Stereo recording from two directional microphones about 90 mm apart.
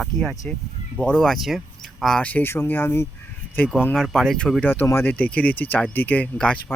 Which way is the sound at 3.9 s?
5° left (ahead or behind).